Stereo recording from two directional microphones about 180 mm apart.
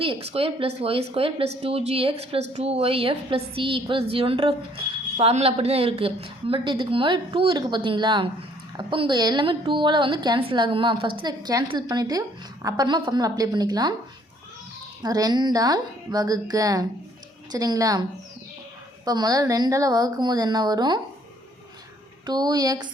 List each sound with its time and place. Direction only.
0.0 s a woman's voice: 30° right (ahead or behind)
15.0 s a woman's voice: 20° right (ahead or behind)
19.0 s a woman's voice: 20° right (ahead or behind)
22.3 s a woman's voice: 25° right (ahead or behind)